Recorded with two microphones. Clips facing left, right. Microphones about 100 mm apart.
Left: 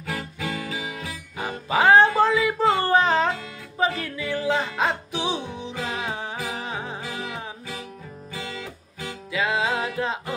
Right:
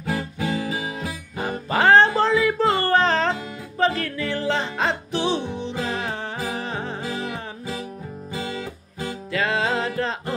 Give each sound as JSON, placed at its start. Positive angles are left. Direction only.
{"t": 0.0, "sound": "guitar", "side_deg": -30}
{"t": 1.7, "sound": "music", "side_deg": 10}
{"t": 7.0, "sound": "music", "side_deg": -20}
{"t": 8.3, "sound": "music", "side_deg": -25}
{"t": 9.3, "sound": "music", "side_deg": 10}